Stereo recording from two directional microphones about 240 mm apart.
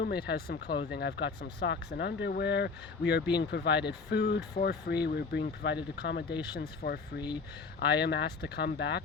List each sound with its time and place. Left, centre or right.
0.0 s speech: left